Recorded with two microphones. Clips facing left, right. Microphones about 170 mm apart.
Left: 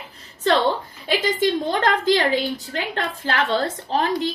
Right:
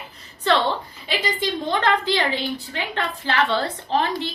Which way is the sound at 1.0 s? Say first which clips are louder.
Left 5 dB; 45° left (ahead or behind).